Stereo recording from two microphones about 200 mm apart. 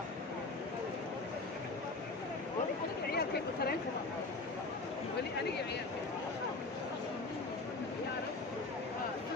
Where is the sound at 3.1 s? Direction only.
50° left (ahead or behind).